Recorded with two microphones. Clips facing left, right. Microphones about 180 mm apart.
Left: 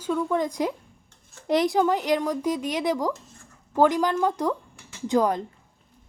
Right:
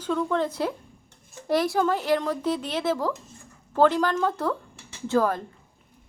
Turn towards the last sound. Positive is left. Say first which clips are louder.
# left 1 dB
turn(degrees=15)  # may be behind; listen again after turning